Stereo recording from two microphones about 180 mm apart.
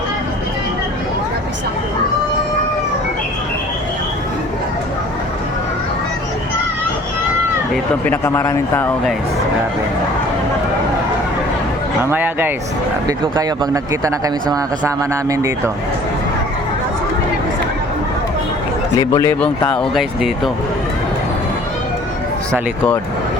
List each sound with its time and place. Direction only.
7.7 s speech: 10° left (ahead or behind)
12.1 s speech: 10° right (ahead or behind)
18.9 s speech: 20° left (ahead or behind)
19.4 s speech: 5° left (ahead or behind)